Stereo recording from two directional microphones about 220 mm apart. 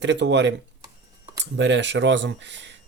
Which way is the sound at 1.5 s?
55° right (ahead or behind).